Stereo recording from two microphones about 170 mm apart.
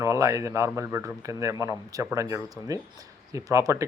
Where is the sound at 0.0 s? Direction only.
20° right (ahead or behind).